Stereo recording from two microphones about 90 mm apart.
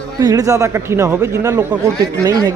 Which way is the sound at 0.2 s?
45° right (ahead or behind).